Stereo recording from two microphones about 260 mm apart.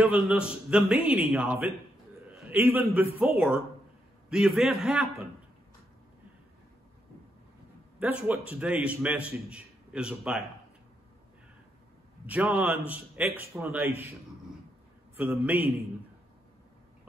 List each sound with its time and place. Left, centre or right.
0.0 s a man's voice: centre
8.0 s a man's voice: centre
12.3 s a man's voice: centre
15.1 s a man's voice: centre